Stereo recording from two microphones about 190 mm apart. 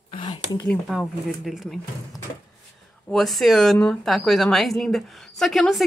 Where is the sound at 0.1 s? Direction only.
20° left (ahead or behind).